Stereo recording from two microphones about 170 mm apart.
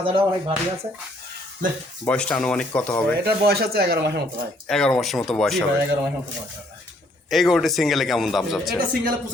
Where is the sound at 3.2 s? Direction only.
65° right (ahead or behind).